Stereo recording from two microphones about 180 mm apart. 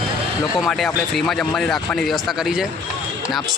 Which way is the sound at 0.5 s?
Centre (ahead or behind).